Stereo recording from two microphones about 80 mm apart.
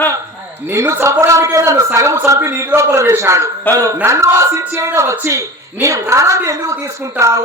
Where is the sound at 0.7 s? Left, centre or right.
Right.